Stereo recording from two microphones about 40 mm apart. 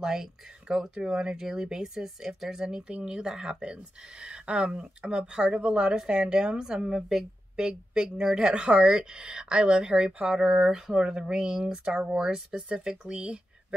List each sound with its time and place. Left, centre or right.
0.0 s speech: centre
6.0 s speech: right; by 7.6 s centre
7.6 s speech: centre
10.2 s speech: centre
12.4 s speech: right